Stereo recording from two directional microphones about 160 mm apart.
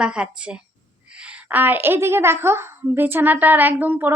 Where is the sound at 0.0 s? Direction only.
5° right (ahead or behind).